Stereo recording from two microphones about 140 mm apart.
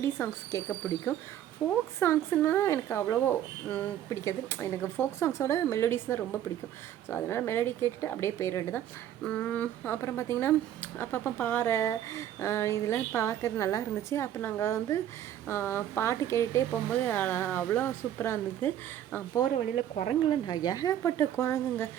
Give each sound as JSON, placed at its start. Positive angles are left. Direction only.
{"t": 0.0, "sound": "speech", "side_deg": 20}
{"t": 20.3, "sound": "speech", "side_deg": 30}